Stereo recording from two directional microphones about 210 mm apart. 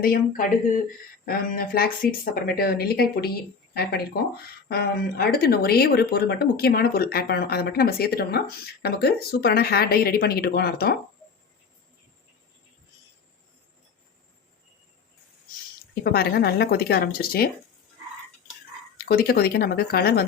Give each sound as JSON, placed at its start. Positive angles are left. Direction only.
{"t": 0.0, "sound": "speech", "side_deg": 45}
{"t": 16.1, "sound": "speech", "side_deg": 50}
{"t": 19.0, "sound": "speech", "side_deg": 45}